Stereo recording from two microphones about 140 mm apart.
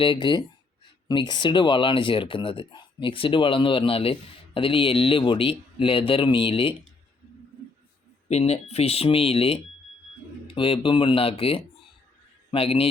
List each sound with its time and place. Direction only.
0.0 s speech: 35° left (ahead or behind)
8.3 s a man's voice: 50° left (ahead or behind)